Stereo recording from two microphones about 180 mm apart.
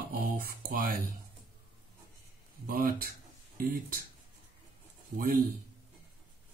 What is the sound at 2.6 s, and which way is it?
Mantra, 55° right (ahead or behind).